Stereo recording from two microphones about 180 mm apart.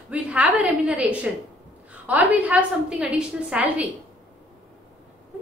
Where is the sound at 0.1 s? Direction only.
10° right (ahead or behind).